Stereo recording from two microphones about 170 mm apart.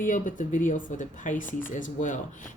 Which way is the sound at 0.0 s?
50° left (ahead or behind).